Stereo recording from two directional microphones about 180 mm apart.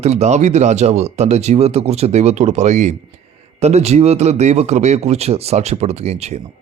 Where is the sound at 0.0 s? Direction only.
35° right (ahead or behind).